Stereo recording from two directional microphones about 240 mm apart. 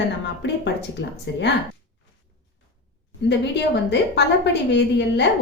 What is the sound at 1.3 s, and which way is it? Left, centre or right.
Speech, left.